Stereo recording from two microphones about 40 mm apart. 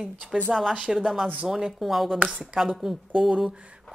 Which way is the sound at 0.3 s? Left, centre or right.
Centre.